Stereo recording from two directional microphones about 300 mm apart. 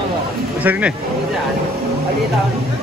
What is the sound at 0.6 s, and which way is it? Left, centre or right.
Speech, centre.